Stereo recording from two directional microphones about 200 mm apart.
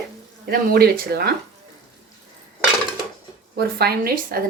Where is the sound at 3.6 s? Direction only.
50° right (ahead or behind).